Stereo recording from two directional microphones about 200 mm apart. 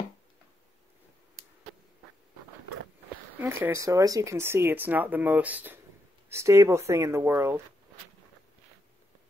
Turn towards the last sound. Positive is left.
turn(degrees=-10)  # may be behind; listen again after turning